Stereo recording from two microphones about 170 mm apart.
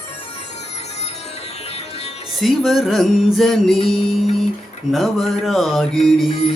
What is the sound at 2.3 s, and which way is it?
Mantra, centre (ahead or behind).